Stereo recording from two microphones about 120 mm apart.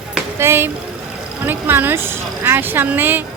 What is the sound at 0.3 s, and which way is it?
Speech, 20° right (ahead or behind).